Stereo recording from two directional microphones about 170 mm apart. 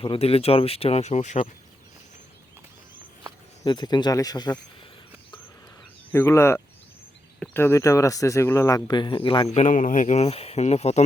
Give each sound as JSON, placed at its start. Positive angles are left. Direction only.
{"t": 0.0, "sound": "speech", "side_deg": 35}
{"t": 3.6, "sound": "speech", "side_deg": 25}
{"t": 6.1, "sound": "speech", "side_deg": 10}
{"t": 9.5, "sound": "speech", "side_deg": 45}